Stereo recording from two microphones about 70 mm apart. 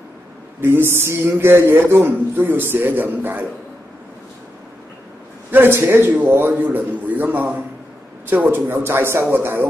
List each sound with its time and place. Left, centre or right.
0.6 s a man's voice: right
5.5 s a man's voice: right